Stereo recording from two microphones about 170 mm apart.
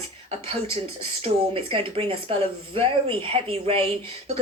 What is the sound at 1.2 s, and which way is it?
Speech, 35° right (ahead or behind).